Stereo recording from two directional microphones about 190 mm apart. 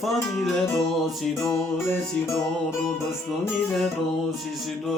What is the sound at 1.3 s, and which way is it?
Music, 15° left (ahead or behind).